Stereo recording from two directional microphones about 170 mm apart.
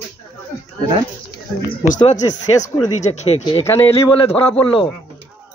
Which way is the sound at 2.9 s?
45° left (ahead or behind).